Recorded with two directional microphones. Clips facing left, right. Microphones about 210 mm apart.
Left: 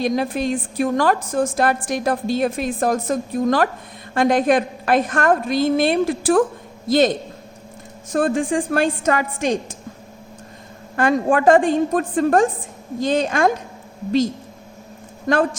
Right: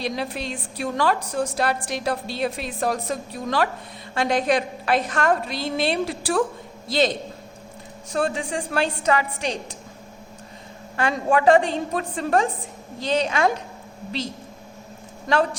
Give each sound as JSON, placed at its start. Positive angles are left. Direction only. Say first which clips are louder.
{"t": 0.0, "sound": "a woman's voice", "louder": "left 7 dB", "side_deg": 50}
{"t": 8.1, "sound": "a woman's voice", "louder": "left 6 dB", "side_deg": 50}
{"t": 10.9, "sound": "a woman's voice", "louder": "left 4 dB", "side_deg": 50}
{"t": 15.3, "sound": "a woman's voice", "louder": "left 3 dB", "side_deg": 50}